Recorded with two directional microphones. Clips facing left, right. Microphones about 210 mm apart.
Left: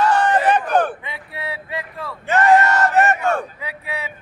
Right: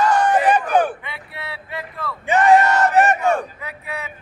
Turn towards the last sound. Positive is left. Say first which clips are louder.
# left 2 dB
turn(degrees=15)  # may be behind; listen again after turning